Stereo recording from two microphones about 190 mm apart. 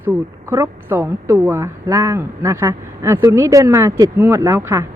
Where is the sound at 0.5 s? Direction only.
15° right (ahead or behind).